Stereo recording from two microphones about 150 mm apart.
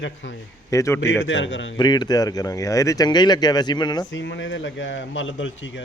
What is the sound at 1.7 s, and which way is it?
Speech, 30° left (ahead or behind).